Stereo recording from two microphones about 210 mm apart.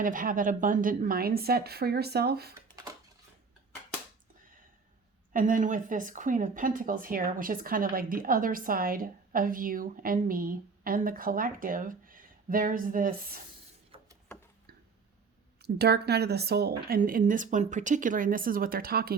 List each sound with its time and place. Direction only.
0.0 s speech: 40° right (ahead or behind)
5.3 s speech: 40° right (ahead or behind)
13.9 s a sound: 25° right (ahead or behind)
15.6 s speech: 50° right (ahead or behind)